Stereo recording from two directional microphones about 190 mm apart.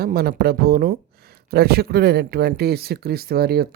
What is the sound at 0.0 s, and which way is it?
Speech, 55° right (ahead or behind).